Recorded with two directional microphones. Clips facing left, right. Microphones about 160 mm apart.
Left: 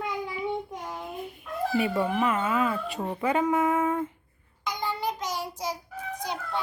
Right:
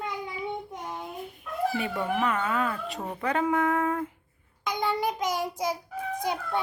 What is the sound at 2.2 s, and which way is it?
Speech, 5° left (ahead or behind).